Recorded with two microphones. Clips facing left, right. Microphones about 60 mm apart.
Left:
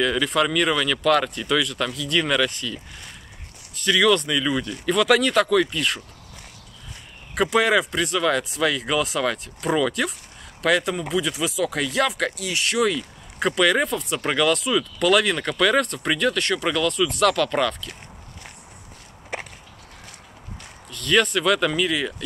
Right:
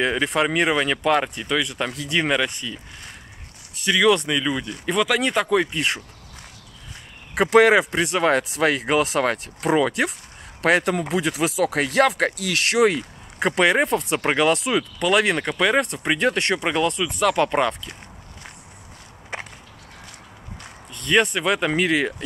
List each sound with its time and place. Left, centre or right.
0.0 s speech: right
3.8 s speech: centre
5.6 s speech: right
7.3 s speech: right
15.0 s speech: right
16.2 s speech: right
20.9 s speech: right
21.7 s speech: right